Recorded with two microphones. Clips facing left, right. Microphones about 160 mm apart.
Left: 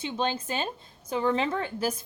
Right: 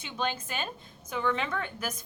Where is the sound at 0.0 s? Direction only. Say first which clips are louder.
Left 4 dB; 30° left (ahead or behind).